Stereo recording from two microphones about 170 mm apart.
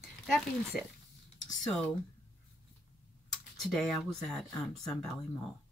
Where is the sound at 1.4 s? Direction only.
5° left (ahead or behind).